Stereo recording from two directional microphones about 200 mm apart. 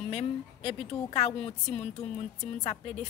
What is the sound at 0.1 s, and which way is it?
Speech, 30° left (ahead or behind).